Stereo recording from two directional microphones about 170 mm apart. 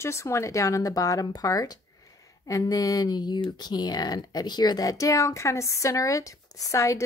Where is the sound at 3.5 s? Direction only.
25° left (ahead or behind).